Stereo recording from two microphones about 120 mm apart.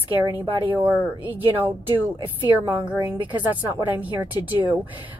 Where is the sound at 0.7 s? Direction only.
15° right (ahead or behind).